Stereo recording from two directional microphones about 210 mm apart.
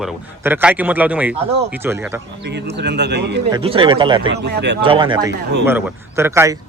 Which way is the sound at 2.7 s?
55° right (ahead or behind).